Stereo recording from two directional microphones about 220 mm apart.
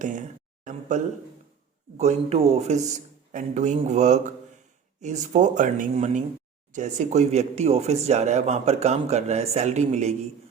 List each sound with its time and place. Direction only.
0.0 s speech: 35° right (ahead or behind)